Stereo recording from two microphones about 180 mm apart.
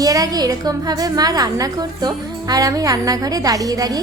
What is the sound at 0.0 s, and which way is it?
A woman's voice, 20° right (ahead or behind).